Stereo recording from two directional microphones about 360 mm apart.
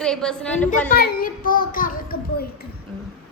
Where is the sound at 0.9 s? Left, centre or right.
Left.